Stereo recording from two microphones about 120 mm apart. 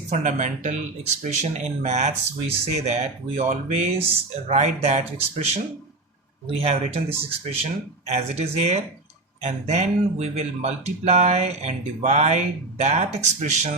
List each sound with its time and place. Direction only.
0.1 s speech: 80° right